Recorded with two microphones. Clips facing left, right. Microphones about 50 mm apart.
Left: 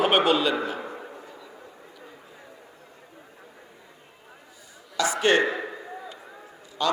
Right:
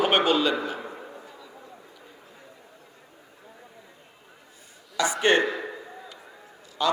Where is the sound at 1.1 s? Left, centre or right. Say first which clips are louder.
Left 1 dB; left.